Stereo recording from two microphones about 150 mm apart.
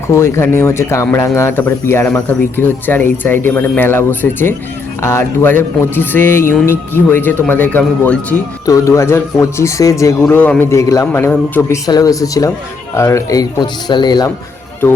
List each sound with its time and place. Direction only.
0.1 s speech: 20° left (ahead or behind)
8.6 s a man's voice: 20° left (ahead or behind)
10.2 s speech: 10° left (ahead or behind)
11.9 s a man's voice: 25° left (ahead or behind)
14.8 s speech: 15° left (ahead or behind)